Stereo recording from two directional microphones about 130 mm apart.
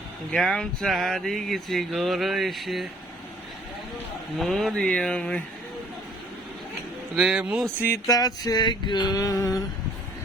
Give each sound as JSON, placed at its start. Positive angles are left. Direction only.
{"t": 0.3, "sound": "speech", "side_deg": 5}
{"t": 4.4, "sound": "speech", "side_deg": 0}
{"t": 7.2, "sound": "speech", "side_deg": -10}
{"t": 7.8, "sound": "speech", "side_deg": 15}
{"t": 8.1, "sound": "a sound", "side_deg": 30}